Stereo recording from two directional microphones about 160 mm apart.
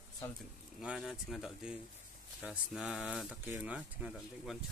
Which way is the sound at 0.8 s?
5° right (ahead or behind).